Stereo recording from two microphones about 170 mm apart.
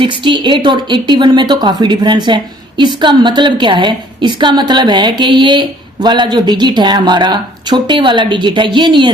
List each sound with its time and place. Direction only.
0.0 s a woman's voice: 30° right (ahead or behind)